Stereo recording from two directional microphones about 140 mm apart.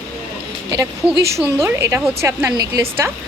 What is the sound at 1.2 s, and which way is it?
A woman's voice, 20° right (ahead or behind).